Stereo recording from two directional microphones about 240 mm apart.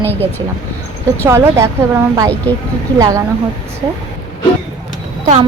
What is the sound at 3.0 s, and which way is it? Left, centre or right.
Speech, centre.